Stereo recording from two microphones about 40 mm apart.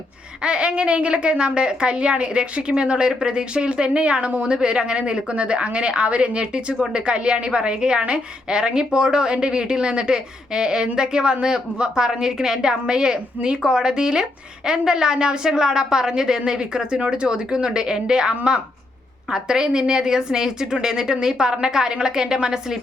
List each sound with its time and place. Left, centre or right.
0.4 s a woman's voice: right